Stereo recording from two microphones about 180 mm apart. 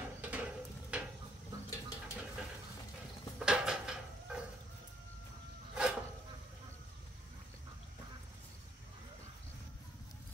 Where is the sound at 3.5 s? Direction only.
5° right (ahead or behind).